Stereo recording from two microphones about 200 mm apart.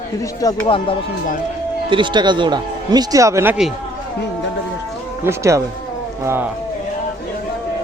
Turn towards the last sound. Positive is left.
turn(degrees=-10)  # may be behind; listen again after turning